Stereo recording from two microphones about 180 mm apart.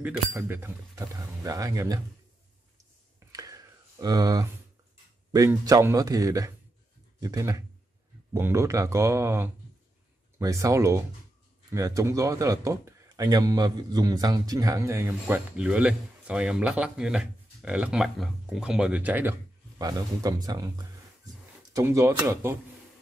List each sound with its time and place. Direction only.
0.0 s speech: 10° right (ahead or behind)
3.3 s a sound: 20° right (ahead or behind)
5.3 s speech: 20° right (ahead or behind)
19.8 s speech: 20° right (ahead or behind)